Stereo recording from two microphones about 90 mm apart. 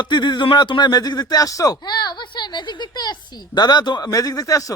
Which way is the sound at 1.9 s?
55° left (ahead or behind).